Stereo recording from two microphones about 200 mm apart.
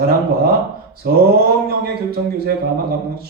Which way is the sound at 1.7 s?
50° right (ahead or behind).